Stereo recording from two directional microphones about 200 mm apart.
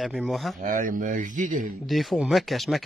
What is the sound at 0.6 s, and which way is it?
Speech, 45° right (ahead or behind).